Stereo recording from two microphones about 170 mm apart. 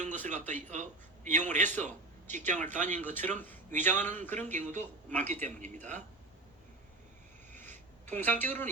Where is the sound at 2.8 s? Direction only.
10° left (ahead or behind).